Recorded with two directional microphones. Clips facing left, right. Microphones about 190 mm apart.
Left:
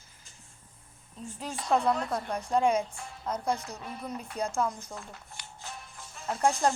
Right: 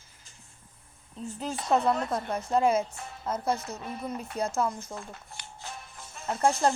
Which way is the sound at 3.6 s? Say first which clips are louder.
Right 3 dB; 20° right (ahead or behind).